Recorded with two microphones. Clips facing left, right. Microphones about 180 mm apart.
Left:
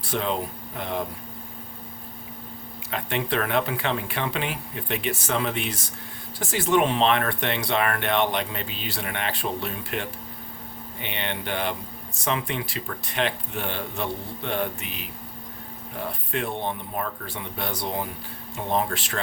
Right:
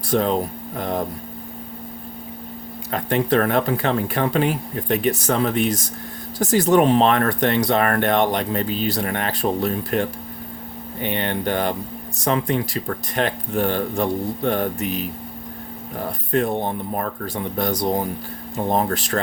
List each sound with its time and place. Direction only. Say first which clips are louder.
0.1 s speech: right 7 dB; 40° right (ahead or behind)
2.9 s speech: right 8 dB; 40° right (ahead or behind)